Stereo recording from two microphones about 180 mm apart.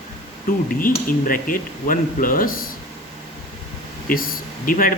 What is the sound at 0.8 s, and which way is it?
Speech, 50° left (ahead or behind).